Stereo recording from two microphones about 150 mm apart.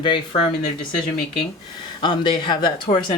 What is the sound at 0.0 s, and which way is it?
Speech, 35° left (ahead or behind).